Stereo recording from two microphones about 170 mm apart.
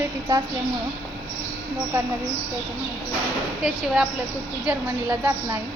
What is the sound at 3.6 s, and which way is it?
A woman's voice, 5° right (ahead or behind).